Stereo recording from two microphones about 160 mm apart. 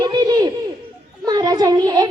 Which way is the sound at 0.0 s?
25° right (ahead or behind).